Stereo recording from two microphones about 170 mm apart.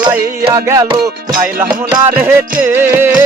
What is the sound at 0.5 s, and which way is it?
Music, 15° right (ahead or behind).